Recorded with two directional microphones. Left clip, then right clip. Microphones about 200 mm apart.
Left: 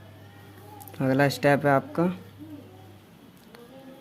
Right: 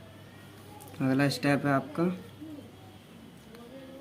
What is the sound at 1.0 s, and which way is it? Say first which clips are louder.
Speech: left 5 dB; 45° left (ahead or behind).